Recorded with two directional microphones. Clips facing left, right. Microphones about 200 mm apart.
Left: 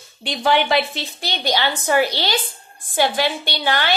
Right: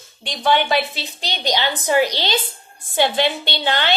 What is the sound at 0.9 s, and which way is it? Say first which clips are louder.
A woman's voice: left 2 dB; 15° right (ahead or behind).